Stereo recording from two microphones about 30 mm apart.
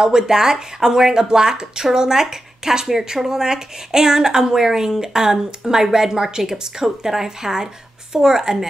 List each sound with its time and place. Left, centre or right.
0.0 s speech: centre